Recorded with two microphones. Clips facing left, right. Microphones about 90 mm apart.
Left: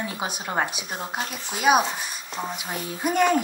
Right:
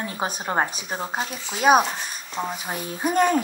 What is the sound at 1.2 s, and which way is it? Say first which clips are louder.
Speech: even; 50° left (ahead or behind).